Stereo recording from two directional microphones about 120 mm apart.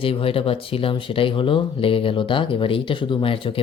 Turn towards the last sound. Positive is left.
turn(degrees=50)  # may be behind; listen again after turning